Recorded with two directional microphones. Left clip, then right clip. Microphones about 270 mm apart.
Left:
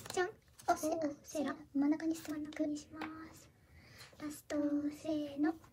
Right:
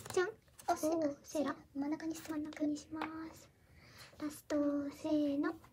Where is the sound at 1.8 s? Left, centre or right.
Centre.